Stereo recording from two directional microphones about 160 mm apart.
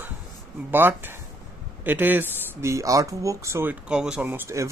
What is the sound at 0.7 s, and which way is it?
Speech, 15° right (ahead or behind).